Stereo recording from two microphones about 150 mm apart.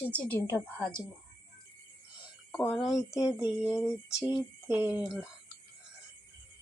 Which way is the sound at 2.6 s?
Centre (ahead or behind).